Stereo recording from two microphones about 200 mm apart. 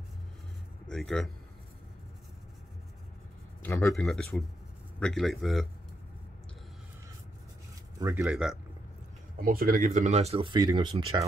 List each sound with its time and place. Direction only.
0.8 s speech: centre (ahead or behind)
3.6 s speech: 15° left (ahead or behind)
3.9 s speech: centre (ahead or behind)
8.0 s speech: 10° right (ahead or behind)
9.4 s speech: 45° right (ahead or behind); by 11.2 s 20° right (ahead or behind)